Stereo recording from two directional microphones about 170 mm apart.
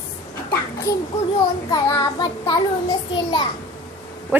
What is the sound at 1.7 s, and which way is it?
A child's voice, 25° left (ahead or behind).